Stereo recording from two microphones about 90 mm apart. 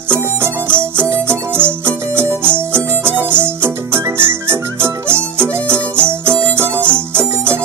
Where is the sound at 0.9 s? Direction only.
30° right (ahead or behind).